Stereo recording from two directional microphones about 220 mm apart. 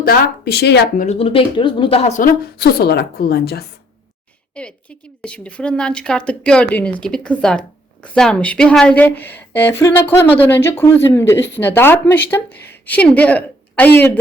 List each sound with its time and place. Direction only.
0.0 s speech: 45° left (ahead or behind)
1.0 s a woman's voice: 30° left (ahead or behind); by 3.6 s 45° left (ahead or behind)
4.5 s a woman's voice: 5° left (ahead or behind)